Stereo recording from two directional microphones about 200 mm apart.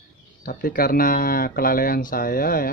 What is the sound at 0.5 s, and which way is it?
Speech, 45° left (ahead or behind).